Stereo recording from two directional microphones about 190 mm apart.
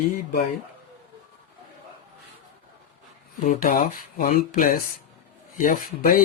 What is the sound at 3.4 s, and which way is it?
Speech, 45° left (ahead or behind).